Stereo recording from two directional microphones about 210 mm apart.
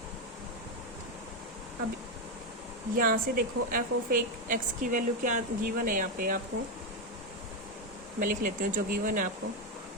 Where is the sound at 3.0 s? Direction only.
40° right (ahead or behind).